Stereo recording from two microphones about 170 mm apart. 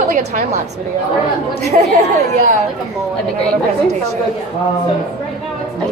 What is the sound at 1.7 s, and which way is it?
Speech, 40° right (ahead or behind).